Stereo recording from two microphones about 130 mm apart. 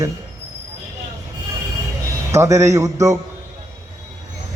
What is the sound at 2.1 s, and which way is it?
Speech, 25° right (ahead or behind).